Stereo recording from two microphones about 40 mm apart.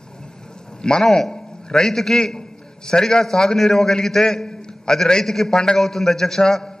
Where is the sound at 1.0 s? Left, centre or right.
Centre.